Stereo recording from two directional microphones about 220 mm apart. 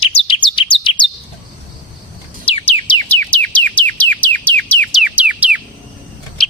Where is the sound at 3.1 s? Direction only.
5° left (ahead or behind).